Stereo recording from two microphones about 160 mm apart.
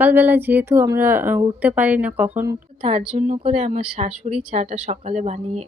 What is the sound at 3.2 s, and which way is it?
Speech, 45° right (ahead or behind).